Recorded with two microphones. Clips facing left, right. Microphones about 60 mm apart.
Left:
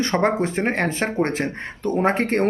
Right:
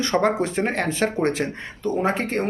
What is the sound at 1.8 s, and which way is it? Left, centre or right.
Speech, left.